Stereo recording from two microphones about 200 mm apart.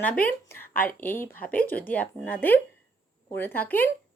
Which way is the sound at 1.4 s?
45° left (ahead or behind).